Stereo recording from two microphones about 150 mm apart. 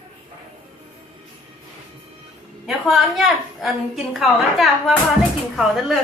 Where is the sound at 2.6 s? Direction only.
Centre (ahead or behind).